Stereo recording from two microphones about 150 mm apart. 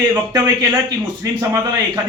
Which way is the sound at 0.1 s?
25° right (ahead or behind).